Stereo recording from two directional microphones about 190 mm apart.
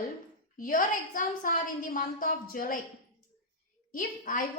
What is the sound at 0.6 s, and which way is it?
A woman's voice, 45° left (ahead or behind).